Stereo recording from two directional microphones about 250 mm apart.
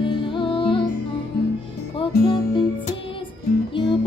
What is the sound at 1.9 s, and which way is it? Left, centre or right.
Music, left.